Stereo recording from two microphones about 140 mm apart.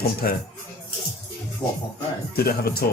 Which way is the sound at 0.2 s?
90° left.